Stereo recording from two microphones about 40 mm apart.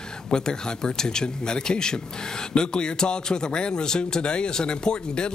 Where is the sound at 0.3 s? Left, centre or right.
Centre.